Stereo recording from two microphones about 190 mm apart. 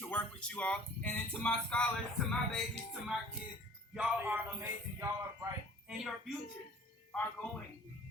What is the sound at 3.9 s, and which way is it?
A man's voice, 5° right (ahead or behind).